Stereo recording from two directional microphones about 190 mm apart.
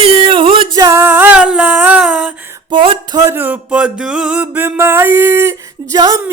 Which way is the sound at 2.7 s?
25° right (ahead or behind).